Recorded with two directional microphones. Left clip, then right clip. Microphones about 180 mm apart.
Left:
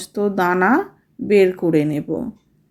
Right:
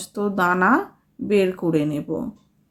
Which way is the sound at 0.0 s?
10° left (ahead or behind).